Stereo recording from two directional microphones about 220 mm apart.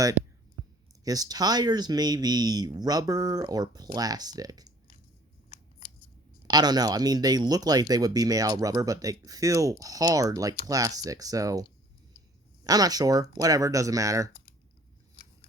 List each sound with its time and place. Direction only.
1.0 s speech: 15° right (ahead or behind)
6.5 s speech: 20° right (ahead or behind)
12.6 s speech: 15° right (ahead or behind)